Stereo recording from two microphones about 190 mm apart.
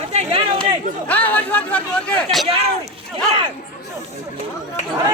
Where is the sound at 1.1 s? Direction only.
10° left (ahead or behind).